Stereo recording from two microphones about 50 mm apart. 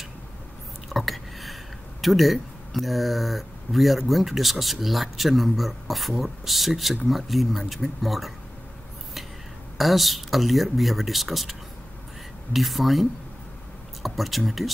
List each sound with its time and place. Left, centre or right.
0.8 s speech: centre
9.8 s speech: centre
12.5 s speech: centre
14.0 s speech: centre